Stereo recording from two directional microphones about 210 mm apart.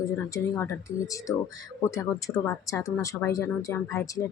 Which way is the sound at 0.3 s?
10° left (ahead or behind).